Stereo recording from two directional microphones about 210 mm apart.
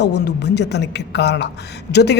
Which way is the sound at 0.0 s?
50° left (ahead or behind).